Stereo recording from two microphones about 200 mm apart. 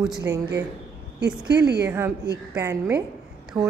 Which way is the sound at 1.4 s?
55° right (ahead or behind).